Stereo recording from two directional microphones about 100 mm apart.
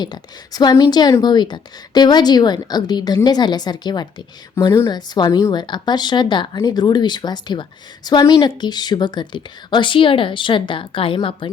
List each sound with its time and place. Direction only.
0.0 s a woman's voice: 45° left (ahead or behind); by 11.5 s 60° left (ahead or behind)